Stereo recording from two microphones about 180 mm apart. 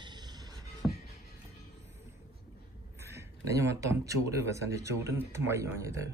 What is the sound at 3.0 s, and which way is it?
A man's voice, 15° right (ahead or behind).